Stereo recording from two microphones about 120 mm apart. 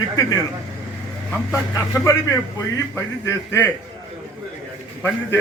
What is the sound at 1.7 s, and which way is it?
A man's voice, 25° left (ahead or behind).